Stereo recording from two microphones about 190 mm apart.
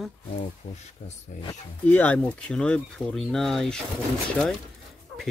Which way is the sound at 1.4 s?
10° left (ahead or behind).